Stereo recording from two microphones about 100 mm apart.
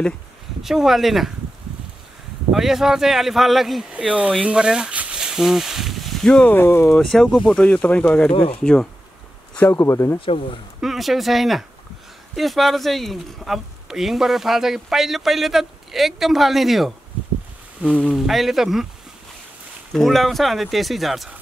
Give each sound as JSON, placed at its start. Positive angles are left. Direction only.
{"t": 0.6, "sound": "speech", "side_deg": -5}
{"t": 2.5, "sound": "speech", "side_deg": -5}
{"t": 3.9, "sound": "speech", "side_deg": -15}
{"t": 6.5, "sound": "speech", "side_deg": 25}
{"t": 6.9, "sound": "speech", "side_deg": 0}
{"t": 8.3, "sound": "speech", "side_deg": 70}
{"t": 9.6, "sound": "speech", "side_deg": 25}
{"t": 10.2, "sound": "speech", "side_deg": 60}
{"t": 10.8, "sound": "speech", "side_deg": 0}
{"t": 17.8, "sound": "speech", "side_deg": -15}
{"t": 18.1, "sound": "speech", "side_deg": 0}
{"t": 19.9, "sound": "speech", "side_deg": 0}